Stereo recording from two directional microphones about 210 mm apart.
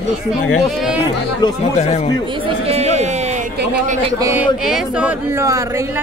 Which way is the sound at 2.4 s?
30° right (ahead or behind).